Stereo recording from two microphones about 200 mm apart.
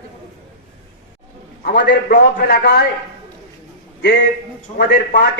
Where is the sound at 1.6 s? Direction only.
60° left (ahead or behind).